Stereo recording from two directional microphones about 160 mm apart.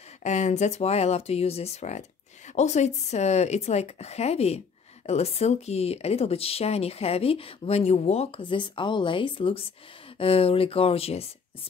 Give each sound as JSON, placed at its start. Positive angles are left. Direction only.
{"t": 0.2, "sound": "speech", "side_deg": 45}